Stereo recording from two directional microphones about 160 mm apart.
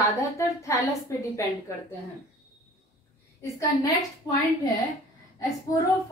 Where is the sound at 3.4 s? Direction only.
20° left (ahead or behind).